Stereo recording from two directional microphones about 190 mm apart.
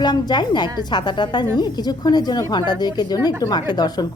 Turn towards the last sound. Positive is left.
turn(degrees=20)  # may be behind; listen again after turning